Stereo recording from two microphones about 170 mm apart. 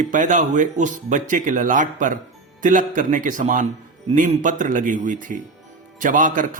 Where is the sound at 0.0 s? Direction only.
50° right (ahead or behind).